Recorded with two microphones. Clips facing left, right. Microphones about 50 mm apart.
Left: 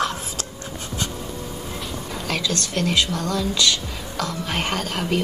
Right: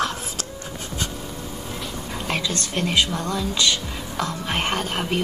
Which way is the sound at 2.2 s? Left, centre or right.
Right.